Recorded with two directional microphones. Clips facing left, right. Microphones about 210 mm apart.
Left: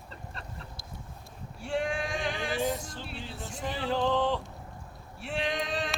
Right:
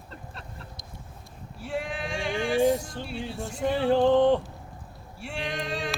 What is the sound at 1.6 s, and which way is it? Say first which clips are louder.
Male singing: left 1 dB; centre (ahead or behind).